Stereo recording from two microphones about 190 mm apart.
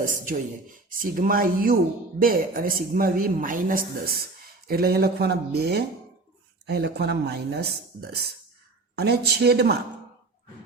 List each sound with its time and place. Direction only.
0.0 s speech: 45° right (ahead or behind)